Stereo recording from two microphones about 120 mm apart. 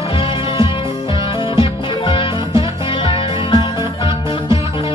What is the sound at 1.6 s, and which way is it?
Music, 50° left (ahead or behind).